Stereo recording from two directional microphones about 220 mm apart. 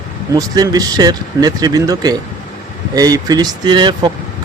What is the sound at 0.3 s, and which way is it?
Speech, 15° right (ahead or behind).